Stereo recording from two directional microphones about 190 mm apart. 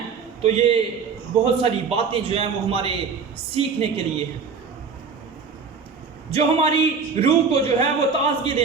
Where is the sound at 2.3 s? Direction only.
30° right (ahead or behind).